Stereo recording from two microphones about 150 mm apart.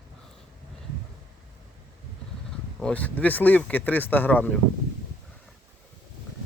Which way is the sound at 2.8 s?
10° left (ahead or behind).